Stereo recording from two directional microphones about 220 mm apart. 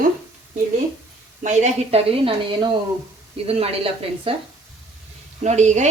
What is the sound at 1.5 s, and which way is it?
A woman's voice, 30° right (ahead or behind).